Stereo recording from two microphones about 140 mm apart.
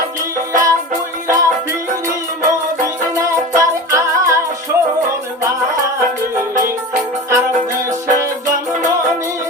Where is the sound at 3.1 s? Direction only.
20° right (ahead or behind).